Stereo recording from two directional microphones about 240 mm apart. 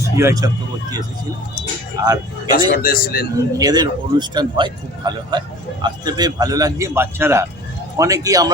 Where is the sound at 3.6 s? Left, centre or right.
Centre.